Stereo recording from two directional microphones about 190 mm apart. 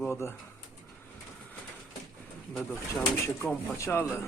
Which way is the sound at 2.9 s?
10° left (ahead or behind).